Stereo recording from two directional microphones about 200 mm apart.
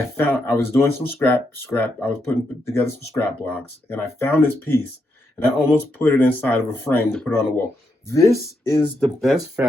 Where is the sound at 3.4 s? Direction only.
10° left (ahead or behind).